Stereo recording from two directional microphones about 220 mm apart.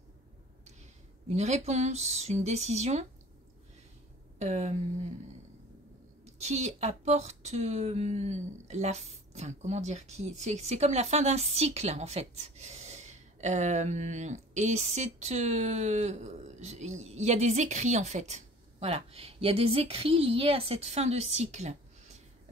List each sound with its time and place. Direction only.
1.3 s speech: 30° right (ahead or behind)
4.4 s speech: 30° right (ahead or behind)
6.4 s speech: 30° right (ahead or behind)